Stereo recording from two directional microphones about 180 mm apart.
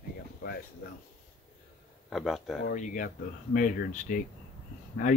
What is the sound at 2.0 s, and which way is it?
Speech, centre (ahead or behind).